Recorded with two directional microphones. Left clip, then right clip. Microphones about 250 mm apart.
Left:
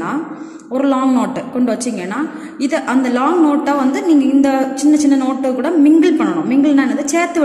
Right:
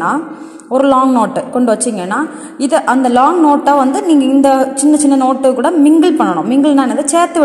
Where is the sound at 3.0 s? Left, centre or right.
Centre.